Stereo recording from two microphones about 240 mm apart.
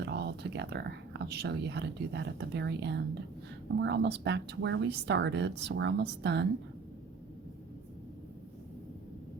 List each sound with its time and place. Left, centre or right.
0.0 s speech: right